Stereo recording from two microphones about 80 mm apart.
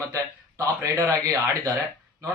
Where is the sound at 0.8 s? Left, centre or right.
Right.